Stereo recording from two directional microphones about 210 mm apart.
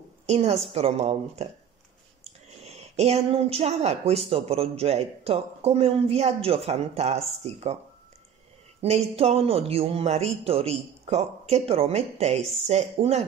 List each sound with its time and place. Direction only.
0.3 s speech: 30° right (ahead or behind)
2.6 s speech: 30° right (ahead or behind)
8.8 s speech: 30° right (ahead or behind)